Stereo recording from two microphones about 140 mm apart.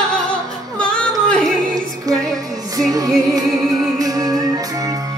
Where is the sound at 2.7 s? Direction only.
25° right (ahead or behind).